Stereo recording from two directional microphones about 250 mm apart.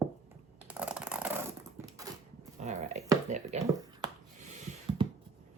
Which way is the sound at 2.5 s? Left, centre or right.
Right.